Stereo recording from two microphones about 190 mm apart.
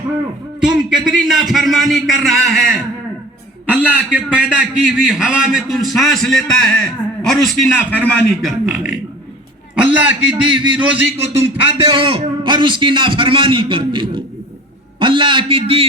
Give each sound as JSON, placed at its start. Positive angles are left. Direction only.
{"t": 0.6, "sound": "a man's voice", "side_deg": -5}
{"t": 3.8, "sound": "a man's voice", "side_deg": -10}
{"t": 10.0, "sound": "a man's voice", "side_deg": -5}
{"t": 11.3, "sound": "a man's voice", "side_deg": -30}